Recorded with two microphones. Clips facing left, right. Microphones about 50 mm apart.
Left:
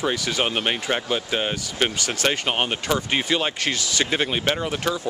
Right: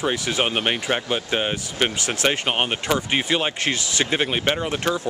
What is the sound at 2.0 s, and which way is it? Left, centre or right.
Speech, right.